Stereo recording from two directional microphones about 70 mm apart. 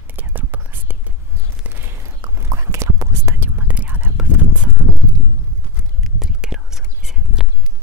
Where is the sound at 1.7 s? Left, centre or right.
Right.